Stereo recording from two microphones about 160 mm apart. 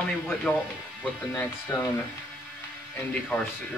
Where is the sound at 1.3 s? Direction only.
15° left (ahead or behind).